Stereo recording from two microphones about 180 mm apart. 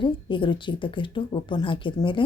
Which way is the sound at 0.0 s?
25° left (ahead or behind).